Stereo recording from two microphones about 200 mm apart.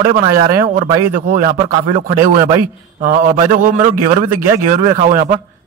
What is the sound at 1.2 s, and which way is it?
A man's voice, 50° right (ahead or behind).